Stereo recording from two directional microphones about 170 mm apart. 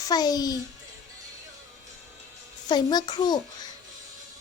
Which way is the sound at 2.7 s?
25° left (ahead or behind).